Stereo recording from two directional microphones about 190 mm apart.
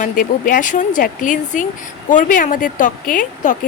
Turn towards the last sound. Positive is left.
turn(degrees=45)  # may be behind; listen again after turning